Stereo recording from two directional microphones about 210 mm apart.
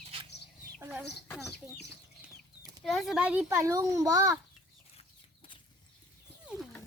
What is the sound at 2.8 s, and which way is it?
A child's voice, centre (ahead or behind).